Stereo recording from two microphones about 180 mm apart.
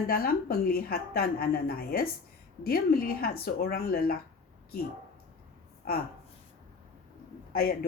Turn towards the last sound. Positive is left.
turn(degrees=55)  # may be behind; listen again after turning